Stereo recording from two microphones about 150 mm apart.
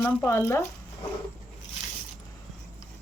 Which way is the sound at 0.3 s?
15° left (ahead or behind).